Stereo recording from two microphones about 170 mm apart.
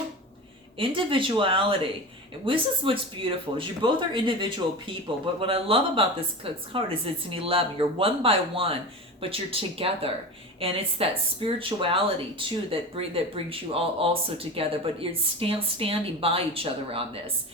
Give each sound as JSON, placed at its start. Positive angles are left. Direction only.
{"t": 0.8, "sound": "speech", "side_deg": -30}